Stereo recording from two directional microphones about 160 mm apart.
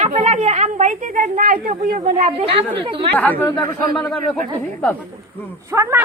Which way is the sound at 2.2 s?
35° right (ahead or behind).